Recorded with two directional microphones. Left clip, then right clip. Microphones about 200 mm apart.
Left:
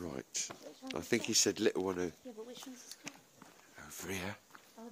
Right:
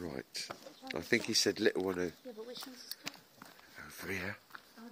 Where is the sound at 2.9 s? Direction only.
55° right (ahead or behind).